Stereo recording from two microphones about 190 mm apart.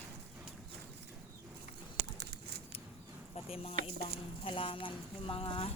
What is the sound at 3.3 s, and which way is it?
Speech, 30° left (ahead or behind).